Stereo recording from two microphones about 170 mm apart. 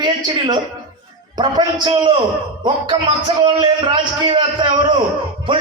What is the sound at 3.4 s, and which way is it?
A man's voice, 30° right (ahead or behind).